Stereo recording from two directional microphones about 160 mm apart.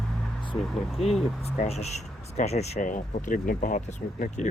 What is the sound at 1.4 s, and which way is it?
Speech, 40° left (ahead or behind).